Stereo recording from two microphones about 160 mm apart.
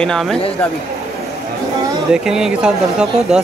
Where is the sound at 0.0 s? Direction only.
5° left (ahead or behind).